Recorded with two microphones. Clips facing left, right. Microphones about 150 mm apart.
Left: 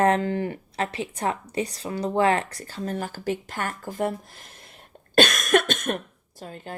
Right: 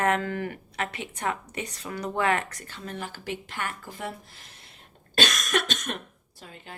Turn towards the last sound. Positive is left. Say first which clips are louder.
# left 8 dB
turn(degrees=40)  # may be behind; listen again after turning